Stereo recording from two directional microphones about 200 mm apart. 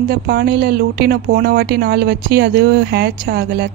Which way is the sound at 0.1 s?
50° right (ahead or behind).